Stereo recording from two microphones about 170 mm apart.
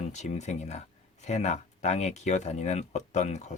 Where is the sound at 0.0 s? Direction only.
40° left (ahead or behind).